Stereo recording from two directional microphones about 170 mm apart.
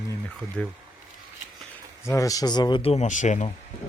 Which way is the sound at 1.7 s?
15° left (ahead or behind).